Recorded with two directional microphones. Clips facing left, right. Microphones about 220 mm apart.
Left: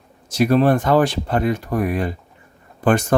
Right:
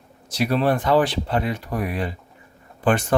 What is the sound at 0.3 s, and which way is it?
Speech, 45° left (ahead or behind).